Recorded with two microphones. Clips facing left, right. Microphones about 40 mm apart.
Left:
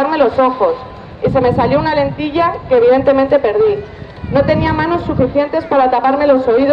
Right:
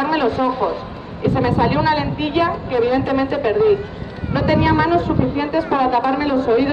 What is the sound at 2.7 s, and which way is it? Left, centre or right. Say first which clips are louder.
Speech: left 9 dB; centre.